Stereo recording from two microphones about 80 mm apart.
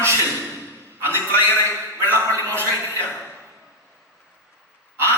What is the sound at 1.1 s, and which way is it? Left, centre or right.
A man's voice, left.